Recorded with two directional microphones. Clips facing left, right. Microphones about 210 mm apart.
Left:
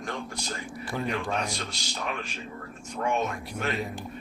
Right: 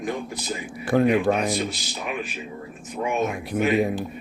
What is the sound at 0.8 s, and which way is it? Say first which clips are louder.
Speech: right 13 dB; 55° right (ahead or behind).